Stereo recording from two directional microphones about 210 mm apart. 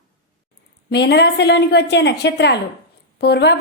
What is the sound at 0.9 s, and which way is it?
A woman's voice, 55° left (ahead or behind).